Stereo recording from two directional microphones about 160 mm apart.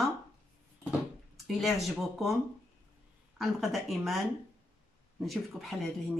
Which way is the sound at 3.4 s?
Centre (ahead or behind).